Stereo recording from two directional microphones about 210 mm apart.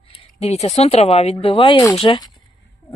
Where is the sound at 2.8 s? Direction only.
25° left (ahead or behind).